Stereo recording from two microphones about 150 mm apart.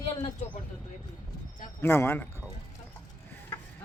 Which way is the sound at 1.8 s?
15° left (ahead or behind).